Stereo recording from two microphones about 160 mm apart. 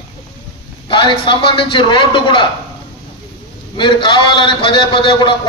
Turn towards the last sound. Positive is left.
turn(degrees=30)  # may be behind; listen again after turning